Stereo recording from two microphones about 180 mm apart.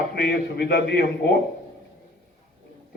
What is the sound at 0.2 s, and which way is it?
Speech, 60° left (ahead or behind).